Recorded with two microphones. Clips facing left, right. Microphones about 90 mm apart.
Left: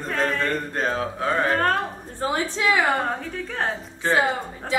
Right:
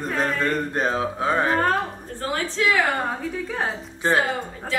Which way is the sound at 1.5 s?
Centre (ahead or behind).